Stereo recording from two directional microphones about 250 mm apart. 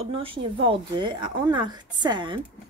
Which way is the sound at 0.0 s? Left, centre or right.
Right.